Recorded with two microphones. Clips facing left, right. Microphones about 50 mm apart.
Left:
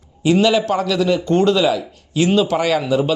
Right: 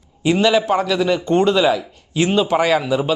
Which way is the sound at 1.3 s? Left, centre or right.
Right.